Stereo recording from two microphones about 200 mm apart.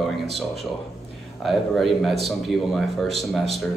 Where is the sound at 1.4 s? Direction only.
Centre (ahead or behind).